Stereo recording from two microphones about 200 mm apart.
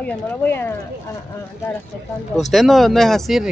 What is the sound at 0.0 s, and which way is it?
Speech, 10° left (ahead or behind).